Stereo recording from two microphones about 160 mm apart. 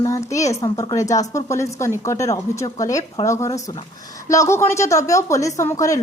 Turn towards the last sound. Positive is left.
turn(degrees=20)  # may be behind; listen again after turning